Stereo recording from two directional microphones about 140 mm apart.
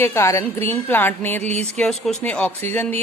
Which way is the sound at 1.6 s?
5° left (ahead or behind).